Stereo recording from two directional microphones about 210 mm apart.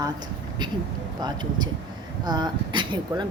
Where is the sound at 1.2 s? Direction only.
20° right (ahead or behind).